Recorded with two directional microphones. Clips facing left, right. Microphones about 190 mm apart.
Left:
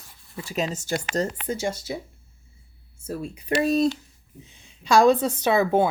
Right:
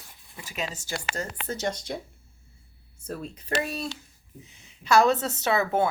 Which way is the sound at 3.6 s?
40° left (ahead or behind).